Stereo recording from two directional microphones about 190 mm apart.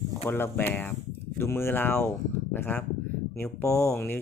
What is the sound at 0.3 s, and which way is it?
Speech, 10° left (ahead or behind).